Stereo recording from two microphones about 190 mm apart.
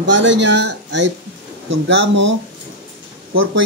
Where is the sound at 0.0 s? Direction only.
75° right (ahead or behind).